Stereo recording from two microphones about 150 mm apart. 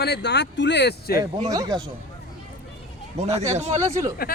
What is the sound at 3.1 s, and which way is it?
Speech, 45° right (ahead or behind).